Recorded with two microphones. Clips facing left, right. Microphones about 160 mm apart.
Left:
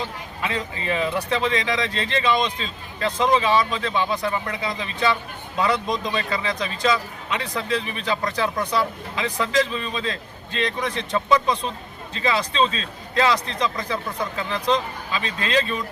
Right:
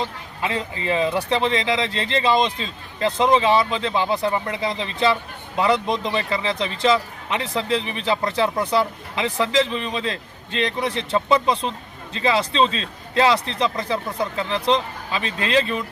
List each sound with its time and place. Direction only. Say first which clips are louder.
0.4 s a man's voice: right 2 dB; 25° right (ahead or behind)